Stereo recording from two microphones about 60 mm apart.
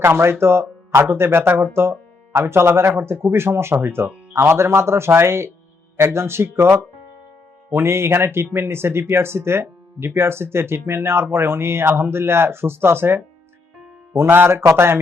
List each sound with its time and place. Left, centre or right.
0.0 s speech: right